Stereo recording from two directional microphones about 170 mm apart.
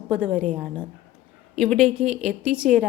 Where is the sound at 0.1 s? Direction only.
5° right (ahead or behind).